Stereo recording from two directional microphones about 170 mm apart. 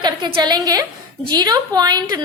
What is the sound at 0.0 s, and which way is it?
A woman's voice, 25° right (ahead or behind).